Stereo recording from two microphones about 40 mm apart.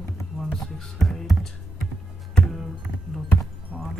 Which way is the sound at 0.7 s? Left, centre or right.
Centre.